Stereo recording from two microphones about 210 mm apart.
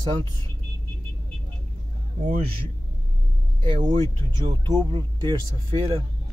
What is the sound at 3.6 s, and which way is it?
Speech, 25° right (ahead or behind).